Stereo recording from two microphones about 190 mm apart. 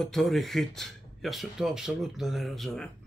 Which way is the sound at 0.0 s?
Centre (ahead or behind).